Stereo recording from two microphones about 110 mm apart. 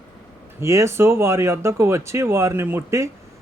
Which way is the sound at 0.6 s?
25° right (ahead or behind).